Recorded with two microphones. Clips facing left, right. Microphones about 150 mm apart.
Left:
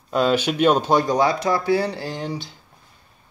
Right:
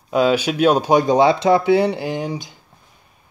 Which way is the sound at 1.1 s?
25° right (ahead or behind).